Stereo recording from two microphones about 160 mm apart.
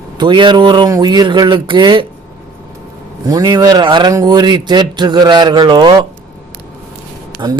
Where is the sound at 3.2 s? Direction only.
25° right (ahead or behind).